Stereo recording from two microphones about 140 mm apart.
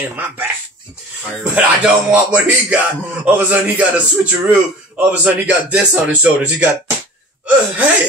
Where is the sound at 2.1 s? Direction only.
10° right (ahead or behind).